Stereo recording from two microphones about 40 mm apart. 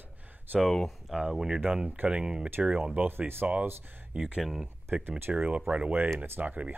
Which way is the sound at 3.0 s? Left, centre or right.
Right.